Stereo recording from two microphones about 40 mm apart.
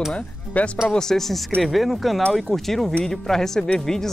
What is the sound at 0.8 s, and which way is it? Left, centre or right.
Speech, centre.